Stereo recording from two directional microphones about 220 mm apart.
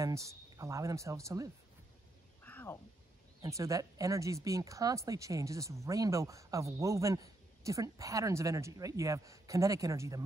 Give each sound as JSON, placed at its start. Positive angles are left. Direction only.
{"t": 0.0, "sound": "a man's voice", "side_deg": -15}
{"t": 2.4, "sound": "a sound", "side_deg": 10}
{"t": 3.4, "sound": "a man's voice", "side_deg": -15}